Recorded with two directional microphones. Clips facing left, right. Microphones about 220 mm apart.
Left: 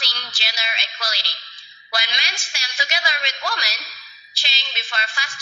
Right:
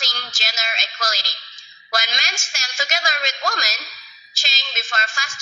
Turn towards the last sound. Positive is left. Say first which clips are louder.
# right 2 dB
turn(degrees=-45)  # may be behind; listen again after turning